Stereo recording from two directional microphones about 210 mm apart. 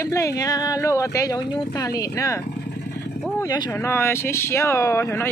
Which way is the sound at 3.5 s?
10° left (ahead or behind).